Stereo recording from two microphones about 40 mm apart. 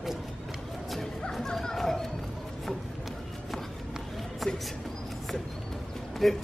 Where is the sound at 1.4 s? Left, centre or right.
Centre.